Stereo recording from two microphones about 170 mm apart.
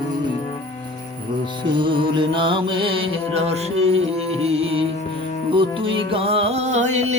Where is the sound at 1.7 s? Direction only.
30° right (ahead or behind).